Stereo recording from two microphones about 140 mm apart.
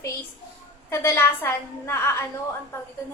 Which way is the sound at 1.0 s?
20° left (ahead or behind).